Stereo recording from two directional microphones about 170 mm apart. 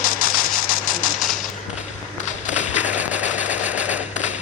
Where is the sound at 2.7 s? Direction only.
10° right (ahead or behind).